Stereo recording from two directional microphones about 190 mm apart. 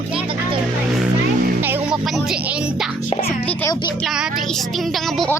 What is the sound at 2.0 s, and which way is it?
Speech, centre (ahead or behind).